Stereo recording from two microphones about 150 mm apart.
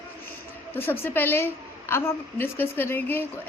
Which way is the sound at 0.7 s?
15° left (ahead or behind).